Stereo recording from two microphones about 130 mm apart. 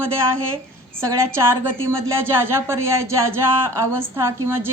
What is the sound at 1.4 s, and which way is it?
Speech, 20° right (ahead or behind).